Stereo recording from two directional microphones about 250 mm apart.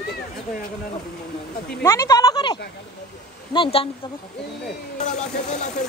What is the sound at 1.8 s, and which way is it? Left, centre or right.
Speech, centre.